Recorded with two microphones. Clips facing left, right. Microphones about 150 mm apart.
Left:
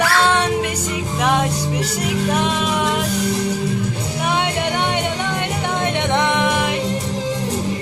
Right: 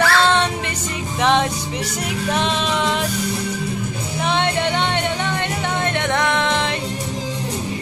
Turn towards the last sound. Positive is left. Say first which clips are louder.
# left 2 dB
turn(degrees=10)  # may be behind; listen again after turning